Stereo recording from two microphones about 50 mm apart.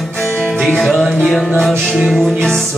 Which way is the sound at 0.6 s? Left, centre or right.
Centre.